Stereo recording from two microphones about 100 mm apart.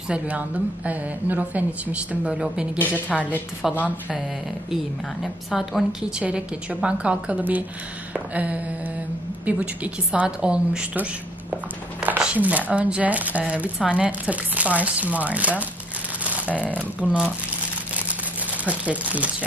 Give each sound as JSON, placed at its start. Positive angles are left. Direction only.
{"t": 0.8, "sound": "a woman's voice", "side_deg": -15}
{"t": 2.8, "sound": "a woman's voice", "side_deg": 20}
{"t": 3.6, "sound": "a woman's voice", "side_deg": -5}
{"t": 5.2, "sound": "a woman's voice", "side_deg": -5}
{"t": 16.4, "sound": "speech", "side_deg": 15}
{"t": 17.0, "sound": "a woman's voice", "side_deg": -10}
{"t": 18.7, "sound": "a woman's voice", "side_deg": -15}